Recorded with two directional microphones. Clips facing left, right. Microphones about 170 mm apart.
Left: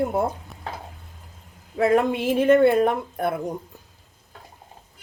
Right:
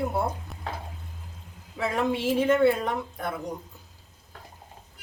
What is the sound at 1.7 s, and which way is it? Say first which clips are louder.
Speech: left 7 dB; 55° left (ahead or behind).